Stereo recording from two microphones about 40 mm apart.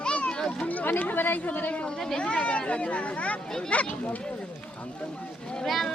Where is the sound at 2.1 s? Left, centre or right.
Left.